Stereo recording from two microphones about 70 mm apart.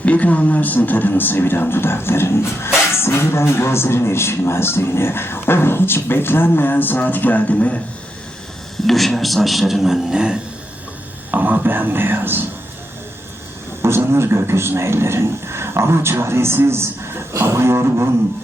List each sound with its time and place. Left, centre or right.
0.0 s speech: left
8.9 s a man's voice: centre
11.3 s speech: right
13.8 s a man's voice: right